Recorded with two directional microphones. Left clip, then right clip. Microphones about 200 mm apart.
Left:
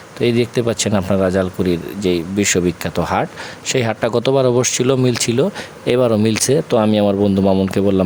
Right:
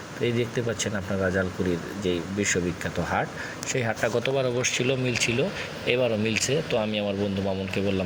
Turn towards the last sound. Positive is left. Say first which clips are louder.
# left 12 dB
turn(degrees=45)  # may be behind; listen again after turning